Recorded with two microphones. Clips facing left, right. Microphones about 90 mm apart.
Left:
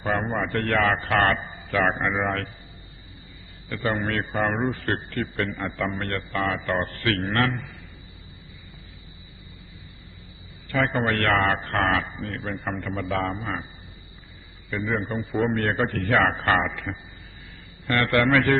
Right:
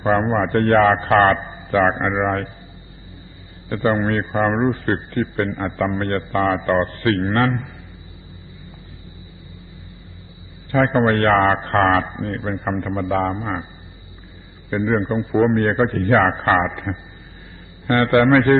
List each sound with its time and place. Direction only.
0.0 s a man's voice: 35° right (ahead or behind)
3.7 s a man's voice: 35° right (ahead or behind)
10.7 s a man's voice: 35° right (ahead or behind)
14.7 s a man's voice: 30° right (ahead or behind)